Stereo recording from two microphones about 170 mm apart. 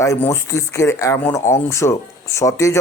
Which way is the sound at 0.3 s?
15° left (ahead or behind).